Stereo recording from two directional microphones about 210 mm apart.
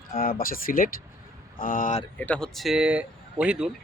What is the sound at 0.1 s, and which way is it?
Speech, 45° left (ahead or behind).